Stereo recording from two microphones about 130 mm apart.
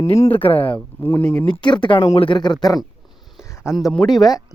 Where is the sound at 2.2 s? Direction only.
35° left (ahead or behind).